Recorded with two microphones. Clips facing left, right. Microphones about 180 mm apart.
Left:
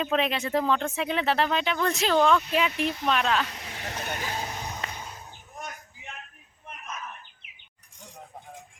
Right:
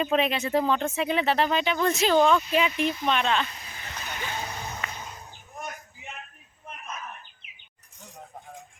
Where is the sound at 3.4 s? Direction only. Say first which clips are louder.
Left 3 dB; 80° left; by 4.2 s 60° left (ahead or behind).